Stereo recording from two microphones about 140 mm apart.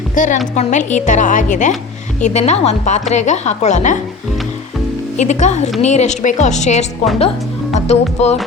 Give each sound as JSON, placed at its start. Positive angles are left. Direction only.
{"t": 0.2, "sound": "a woman's voice", "side_deg": 65}
{"t": 5.1, "sound": "a woman's voice", "side_deg": 55}